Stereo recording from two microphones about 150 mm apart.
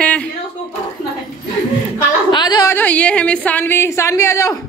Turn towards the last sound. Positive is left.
turn(degrees=20)  # may be behind; listen again after turning